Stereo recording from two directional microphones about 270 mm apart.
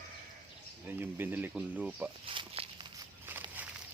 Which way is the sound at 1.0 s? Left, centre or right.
Centre.